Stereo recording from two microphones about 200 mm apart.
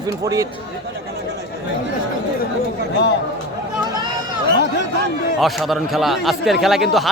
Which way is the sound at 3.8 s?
20° right (ahead or behind).